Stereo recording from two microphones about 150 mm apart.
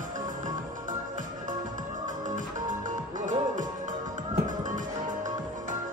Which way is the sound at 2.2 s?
60° right (ahead or behind).